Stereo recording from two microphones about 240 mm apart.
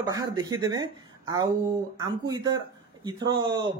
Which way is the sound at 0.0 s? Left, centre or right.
Centre.